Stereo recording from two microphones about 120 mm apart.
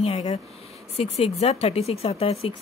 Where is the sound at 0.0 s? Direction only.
65° left (ahead or behind).